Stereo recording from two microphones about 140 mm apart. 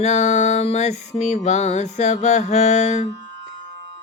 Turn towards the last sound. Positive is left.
turn(degrees=55)  # may be behind; listen again after turning